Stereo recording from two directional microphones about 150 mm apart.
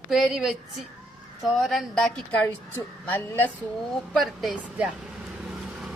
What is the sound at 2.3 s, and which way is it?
A man's voice, 10° left (ahead or behind).